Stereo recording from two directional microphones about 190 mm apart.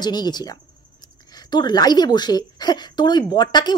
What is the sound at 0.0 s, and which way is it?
A woman's voice, 20° left (ahead or behind).